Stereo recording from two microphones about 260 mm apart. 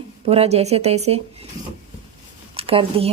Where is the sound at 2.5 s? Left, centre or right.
Right.